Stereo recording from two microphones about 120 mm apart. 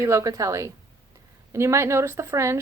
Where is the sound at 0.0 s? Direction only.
25° right (ahead or behind).